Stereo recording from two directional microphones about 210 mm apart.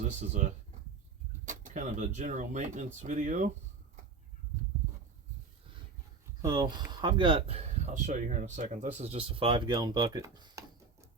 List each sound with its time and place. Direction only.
1.5 s speech: 35° right (ahead or behind)
6.4 s speech: 20° right (ahead or behind)